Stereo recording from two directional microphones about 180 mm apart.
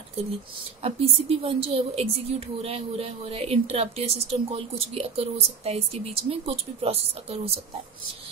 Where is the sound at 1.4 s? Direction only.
30° right (ahead or behind).